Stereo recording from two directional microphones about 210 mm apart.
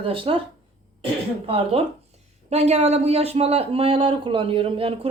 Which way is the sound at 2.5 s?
30° right (ahead or behind).